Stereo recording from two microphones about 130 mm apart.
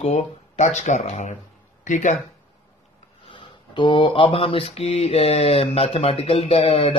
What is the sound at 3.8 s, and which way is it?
Speech, 40° left (ahead or behind).